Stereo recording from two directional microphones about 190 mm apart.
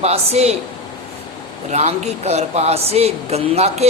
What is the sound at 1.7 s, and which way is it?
A woman's voice, 35° right (ahead or behind).